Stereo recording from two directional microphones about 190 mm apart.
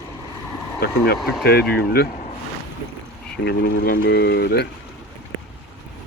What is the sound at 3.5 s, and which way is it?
Speech, 55° left (ahead or behind).